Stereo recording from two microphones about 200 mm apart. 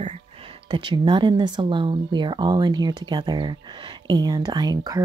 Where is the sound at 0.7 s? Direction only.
25° right (ahead or behind).